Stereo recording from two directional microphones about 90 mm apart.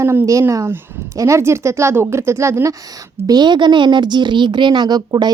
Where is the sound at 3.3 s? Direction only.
55° right (ahead or behind).